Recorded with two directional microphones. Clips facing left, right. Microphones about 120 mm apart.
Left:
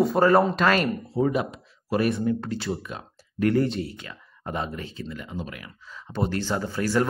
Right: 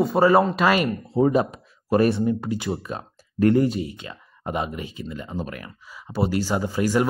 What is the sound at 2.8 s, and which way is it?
Speech, 35° right (ahead or behind).